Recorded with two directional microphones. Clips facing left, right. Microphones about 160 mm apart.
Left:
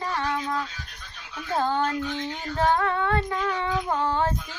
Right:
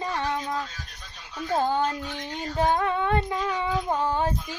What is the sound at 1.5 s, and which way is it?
Child singing, 15° right (ahead or behind).